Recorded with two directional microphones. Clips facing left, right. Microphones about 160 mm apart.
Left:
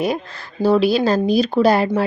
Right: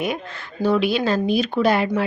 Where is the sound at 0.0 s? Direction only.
35° left (ahead or behind).